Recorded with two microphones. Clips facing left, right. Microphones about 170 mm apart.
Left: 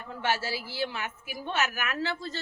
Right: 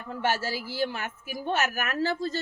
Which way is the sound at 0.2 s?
45° right (ahead or behind).